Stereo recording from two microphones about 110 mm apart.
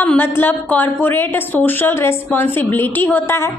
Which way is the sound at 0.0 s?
15° left (ahead or behind).